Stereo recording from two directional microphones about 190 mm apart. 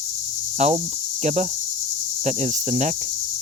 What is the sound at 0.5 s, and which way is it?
Cricket, 40° right (ahead or behind).